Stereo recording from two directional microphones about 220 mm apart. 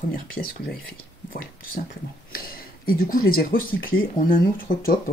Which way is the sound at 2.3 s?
40° left (ahead or behind).